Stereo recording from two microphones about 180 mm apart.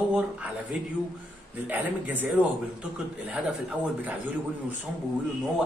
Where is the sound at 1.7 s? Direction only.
10° right (ahead or behind).